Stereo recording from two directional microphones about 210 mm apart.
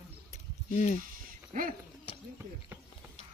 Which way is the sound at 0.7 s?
35° left (ahead or behind).